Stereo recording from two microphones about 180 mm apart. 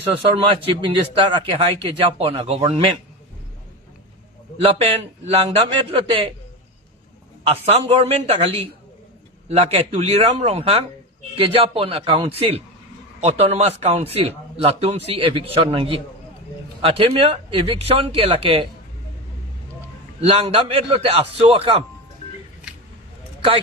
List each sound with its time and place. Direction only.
0.2 s a man's voice: 30° right (ahead or behind)
4.6 s speech: 30° right (ahead or behind)
7.4 s speech: 35° right (ahead or behind)
20.2 s speech: 35° right (ahead or behind)